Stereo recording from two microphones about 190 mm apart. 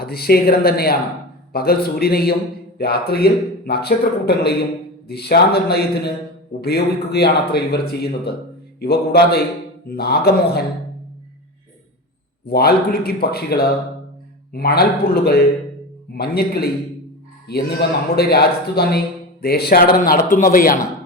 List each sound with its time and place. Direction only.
0.0 s a man's voice: 55° left (ahead or behind)
12.5 s a man's voice: 55° left (ahead or behind)